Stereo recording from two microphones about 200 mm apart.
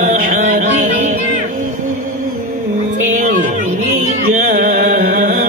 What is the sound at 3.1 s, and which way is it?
Music, 45° right (ahead or behind).